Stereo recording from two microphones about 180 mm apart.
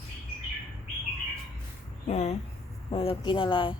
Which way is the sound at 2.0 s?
40° left (ahead or behind).